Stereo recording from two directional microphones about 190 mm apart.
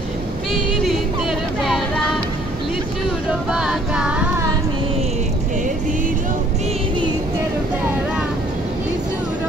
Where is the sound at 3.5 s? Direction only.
5° right (ahead or behind).